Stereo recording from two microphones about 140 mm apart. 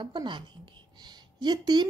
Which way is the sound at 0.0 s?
35° right (ahead or behind).